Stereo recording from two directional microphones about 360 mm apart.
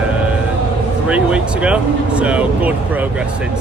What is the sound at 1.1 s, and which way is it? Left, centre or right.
Speech, centre.